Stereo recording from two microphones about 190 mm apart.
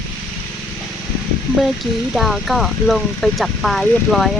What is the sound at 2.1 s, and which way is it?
Speech, centre (ahead or behind).